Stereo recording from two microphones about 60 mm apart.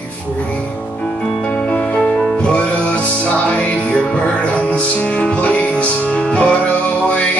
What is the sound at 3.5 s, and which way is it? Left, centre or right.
Music, left.